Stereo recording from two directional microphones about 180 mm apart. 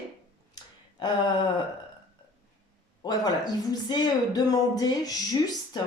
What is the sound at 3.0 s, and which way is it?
Speech, 20° left (ahead or behind).